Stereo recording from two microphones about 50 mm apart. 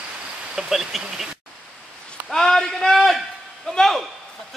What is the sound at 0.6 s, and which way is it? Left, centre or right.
Speech, centre.